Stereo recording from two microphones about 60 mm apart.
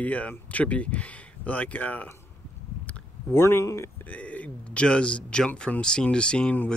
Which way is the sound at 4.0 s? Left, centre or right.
Left.